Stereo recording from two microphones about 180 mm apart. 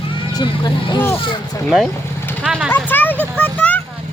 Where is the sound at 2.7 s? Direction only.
10° left (ahead or behind).